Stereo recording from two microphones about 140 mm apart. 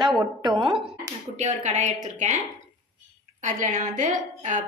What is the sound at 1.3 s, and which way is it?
A woman's voice, 55° right (ahead or behind).